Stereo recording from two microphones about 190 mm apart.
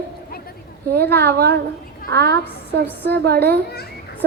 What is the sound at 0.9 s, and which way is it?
A child's voice, 60° right (ahead or behind).